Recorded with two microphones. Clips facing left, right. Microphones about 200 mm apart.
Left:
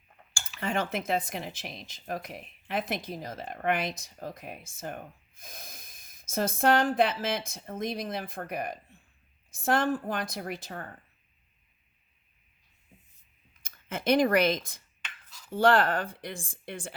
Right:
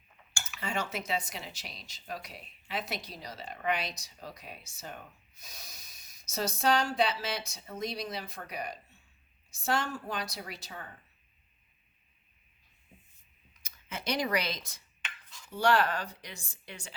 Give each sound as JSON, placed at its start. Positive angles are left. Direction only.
{"t": 0.6, "sound": "speech", "side_deg": 55}
{"t": 13.6, "sound": "speech", "side_deg": 55}